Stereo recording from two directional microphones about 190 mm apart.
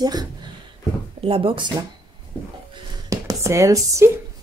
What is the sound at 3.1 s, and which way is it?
Speech, 15° right (ahead or behind).